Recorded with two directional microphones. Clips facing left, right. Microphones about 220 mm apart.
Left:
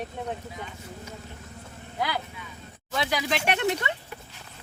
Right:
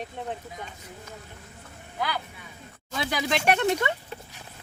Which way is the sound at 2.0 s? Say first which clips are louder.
Left 1 dB; 25° left (ahead or behind).